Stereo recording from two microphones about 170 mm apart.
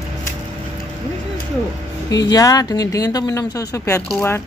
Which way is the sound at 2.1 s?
20° left (ahead or behind).